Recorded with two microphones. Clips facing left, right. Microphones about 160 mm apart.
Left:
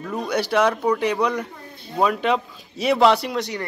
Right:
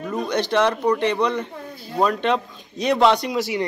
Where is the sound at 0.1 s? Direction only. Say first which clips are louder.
Even; 10° left (ahead or behind).